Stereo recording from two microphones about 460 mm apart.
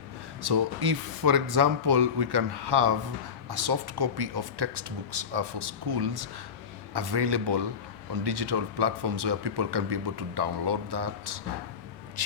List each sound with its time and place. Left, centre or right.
0.4 s speech: right